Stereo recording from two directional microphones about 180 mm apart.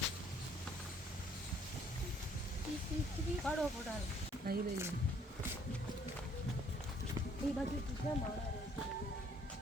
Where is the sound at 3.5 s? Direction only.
5° left (ahead or behind).